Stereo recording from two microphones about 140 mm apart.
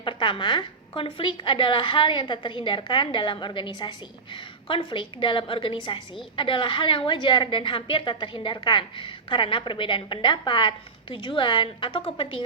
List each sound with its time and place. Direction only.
0.0 s a woman's voice: 35° left (ahead or behind)